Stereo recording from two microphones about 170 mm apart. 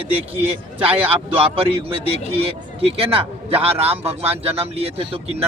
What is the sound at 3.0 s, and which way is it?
Speech, 35° right (ahead or behind).